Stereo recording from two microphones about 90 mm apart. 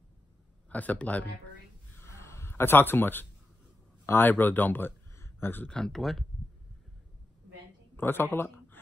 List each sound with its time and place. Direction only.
0.7 s speech: 15° left (ahead or behind)
2.0 s a sound: 30° left (ahead or behind)
4.0 s speech: 25° left (ahead or behind)
5.7 s speech: 5° left (ahead or behind)
7.9 s speech: 25° left (ahead or behind)